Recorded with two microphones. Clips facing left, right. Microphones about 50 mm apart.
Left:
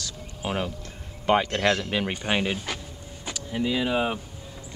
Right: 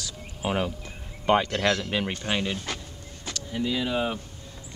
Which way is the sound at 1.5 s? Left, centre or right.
Centre.